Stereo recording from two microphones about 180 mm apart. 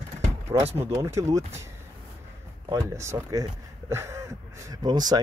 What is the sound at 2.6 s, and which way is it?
Speech, 20° right (ahead or behind).